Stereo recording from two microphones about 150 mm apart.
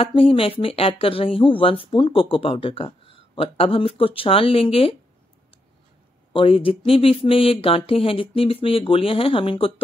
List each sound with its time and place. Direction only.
0.0 s speech: 35° left (ahead or behind)
6.3 s speech: 40° left (ahead or behind)